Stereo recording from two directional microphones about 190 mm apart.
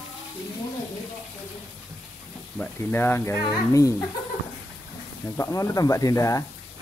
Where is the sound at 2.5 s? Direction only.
10° left (ahead or behind).